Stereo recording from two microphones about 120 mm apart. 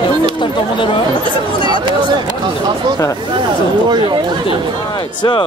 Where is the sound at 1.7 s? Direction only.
40° right (ahead or behind).